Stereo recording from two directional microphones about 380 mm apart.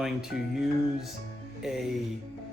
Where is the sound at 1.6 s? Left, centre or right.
Centre.